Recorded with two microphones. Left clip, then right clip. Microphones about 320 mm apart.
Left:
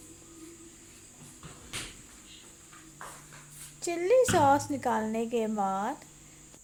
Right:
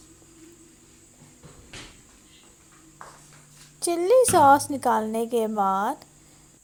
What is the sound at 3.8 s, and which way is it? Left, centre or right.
Speech, centre.